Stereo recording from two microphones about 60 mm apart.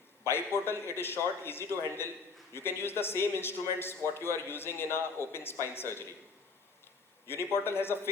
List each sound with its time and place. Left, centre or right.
0.3 s a man's voice: left
7.3 s a man's voice: left